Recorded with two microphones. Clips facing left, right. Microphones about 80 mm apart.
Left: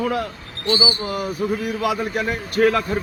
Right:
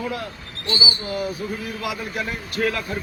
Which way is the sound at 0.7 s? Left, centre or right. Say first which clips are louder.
Left 3 dB; left.